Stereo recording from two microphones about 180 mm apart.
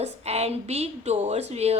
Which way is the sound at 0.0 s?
35° right (ahead or behind).